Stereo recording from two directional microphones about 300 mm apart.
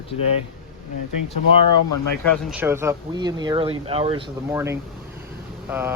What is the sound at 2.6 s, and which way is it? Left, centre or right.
Speech, centre.